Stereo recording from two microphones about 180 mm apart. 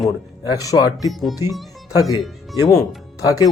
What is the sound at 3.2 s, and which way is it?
Speech, 20° left (ahead or behind).